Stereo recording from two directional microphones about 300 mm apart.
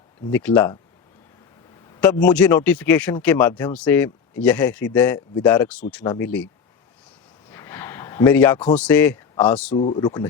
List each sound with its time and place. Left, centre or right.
0.3 s speech: centre
2.0 s speech: centre
7.5 s a sound: centre
8.7 s speech: centre
9.7 s speech: centre